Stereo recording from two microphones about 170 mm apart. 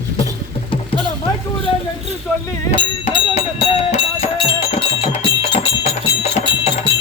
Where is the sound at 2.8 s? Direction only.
30° left (ahead or behind).